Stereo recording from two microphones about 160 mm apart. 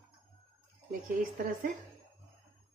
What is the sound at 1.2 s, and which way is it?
Speech, 55° right (ahead or behind).